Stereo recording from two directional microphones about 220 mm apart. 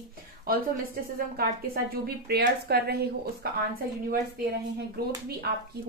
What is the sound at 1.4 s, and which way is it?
A woman's voice, 45° right (ahead or behind).